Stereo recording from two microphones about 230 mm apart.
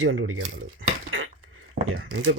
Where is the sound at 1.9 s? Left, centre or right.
Right.